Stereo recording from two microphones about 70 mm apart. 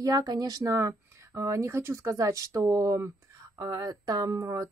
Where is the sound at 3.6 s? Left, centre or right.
Right.